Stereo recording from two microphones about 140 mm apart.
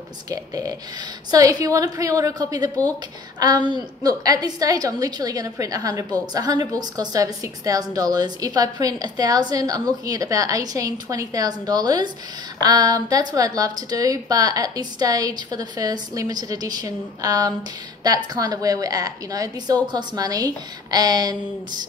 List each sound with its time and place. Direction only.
0.3 s a woman's voice: 25° right (ahead or behind)